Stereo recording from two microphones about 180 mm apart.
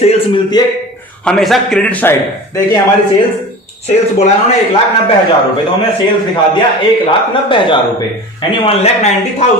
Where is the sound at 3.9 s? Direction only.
35° left (ahead or behind).